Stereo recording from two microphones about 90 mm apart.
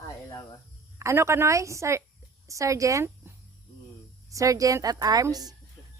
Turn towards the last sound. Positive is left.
turn(degrees=-45)  # may be behind; listen again after turning